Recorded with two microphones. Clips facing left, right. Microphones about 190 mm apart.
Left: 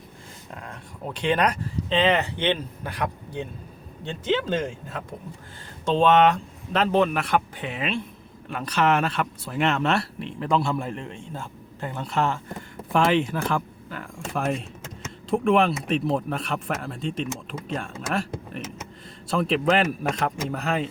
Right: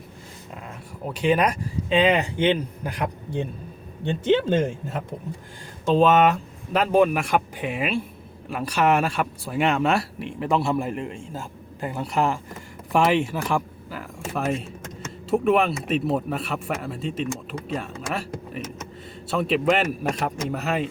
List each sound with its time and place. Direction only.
1.0 s speech: 10° right (ahead or behind)
4.5 s speech: 25° right (ahead or behind)
5.8 s speech: 5° right (ahead or behind)